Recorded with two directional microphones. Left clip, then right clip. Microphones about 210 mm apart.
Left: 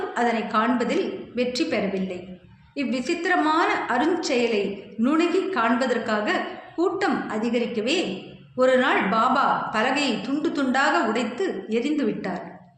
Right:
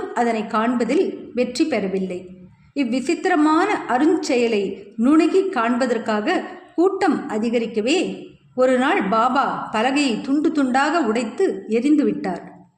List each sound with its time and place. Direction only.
0.1 s a woman's voice: 50° right (ahead or behind)